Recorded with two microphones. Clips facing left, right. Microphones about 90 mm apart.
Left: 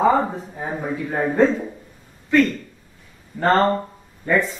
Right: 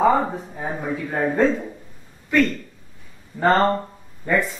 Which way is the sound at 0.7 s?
5° left (ahead or behind).